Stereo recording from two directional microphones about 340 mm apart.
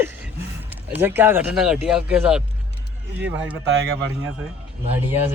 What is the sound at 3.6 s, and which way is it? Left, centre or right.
Speech, right.